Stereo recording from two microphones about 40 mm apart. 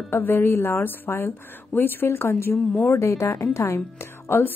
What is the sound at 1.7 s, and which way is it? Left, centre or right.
A woman's voice, left.